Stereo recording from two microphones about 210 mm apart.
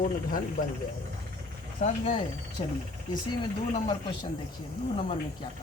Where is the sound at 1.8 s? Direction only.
35° left (ahead or behind).